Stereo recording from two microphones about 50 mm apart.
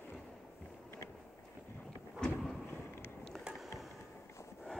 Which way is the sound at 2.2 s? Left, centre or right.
Centre.